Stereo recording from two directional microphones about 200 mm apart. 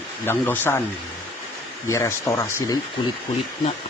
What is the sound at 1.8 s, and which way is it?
Speech, 15° left (ahead or behind).